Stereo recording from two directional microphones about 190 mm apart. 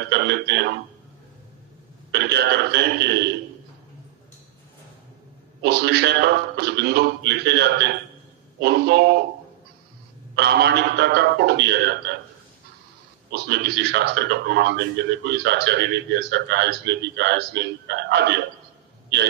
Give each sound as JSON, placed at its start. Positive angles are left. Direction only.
{"t": 0.1, "sound": "a man's voice", "side_deg": -60}
{"t": 2.1, "sound": "a man's voice", "side_deg": -60}
{"t": 5.6, "sound": "a man's voice", "side_deg": -60}
{"t": 10.3, "sound": "a man's voice", "side_deg": -60}
{"t": 13.3, "sound": "a man's voice", "side_deg": -60}